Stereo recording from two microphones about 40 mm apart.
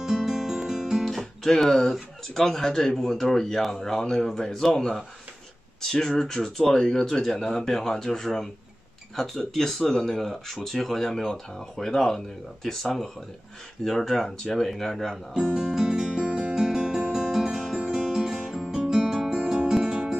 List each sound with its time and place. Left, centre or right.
0.0 s music: centre
1.4 s speech: centre
6.6 s speech: centre
15.3 s music: centre
16.3 s music: right
16.5 s music: centre